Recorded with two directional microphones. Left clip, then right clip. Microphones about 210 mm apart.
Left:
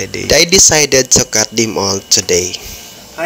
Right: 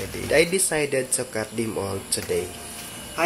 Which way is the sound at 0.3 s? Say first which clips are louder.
Left 12 dB; 45° left (ahead or behind).